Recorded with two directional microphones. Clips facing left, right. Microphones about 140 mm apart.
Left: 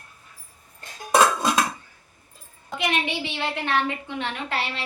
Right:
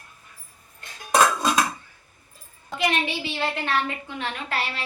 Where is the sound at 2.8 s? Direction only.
20° left (ahead or behind).